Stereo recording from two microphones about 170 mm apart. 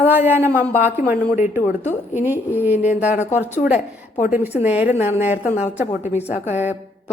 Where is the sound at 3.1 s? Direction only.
45° left (ahead or behind).